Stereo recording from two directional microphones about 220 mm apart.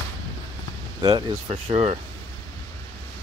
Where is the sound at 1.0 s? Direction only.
25° right (ahead or behind).